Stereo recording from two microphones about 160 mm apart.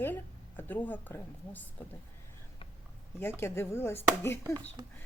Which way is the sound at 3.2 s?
15° left (ahead or behind).